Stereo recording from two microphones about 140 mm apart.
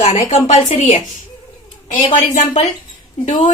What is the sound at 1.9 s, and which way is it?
Speech, 60° left (ahead or behind).